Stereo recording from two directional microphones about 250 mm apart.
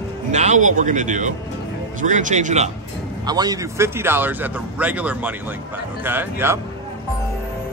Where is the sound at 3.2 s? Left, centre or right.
Centre.